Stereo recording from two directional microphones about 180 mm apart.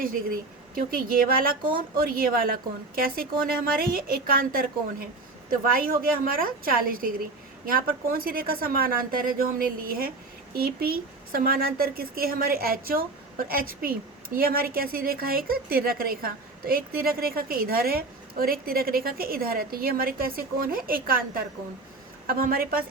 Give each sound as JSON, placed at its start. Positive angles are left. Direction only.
{"t": 0.0, "sound": "a woman's voice", "side_deg": -50}